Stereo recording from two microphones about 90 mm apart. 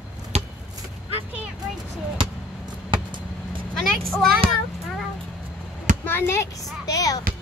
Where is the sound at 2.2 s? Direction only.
60° right (ahead or behind).